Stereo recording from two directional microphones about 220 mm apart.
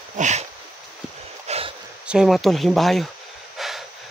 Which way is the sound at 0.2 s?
30° right (ahead or behind).